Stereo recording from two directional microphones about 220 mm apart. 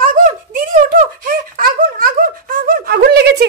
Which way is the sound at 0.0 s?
35° right (ahead or behind).